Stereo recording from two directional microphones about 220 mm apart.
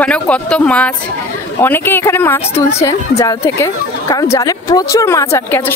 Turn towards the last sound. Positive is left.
turn(degrees=10)  # may be behind; listen again after turning